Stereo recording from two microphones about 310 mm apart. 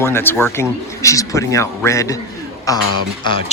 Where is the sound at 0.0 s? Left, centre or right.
Centre.